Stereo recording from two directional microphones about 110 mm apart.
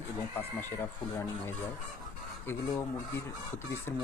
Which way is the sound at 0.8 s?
20° left (ahead or behind).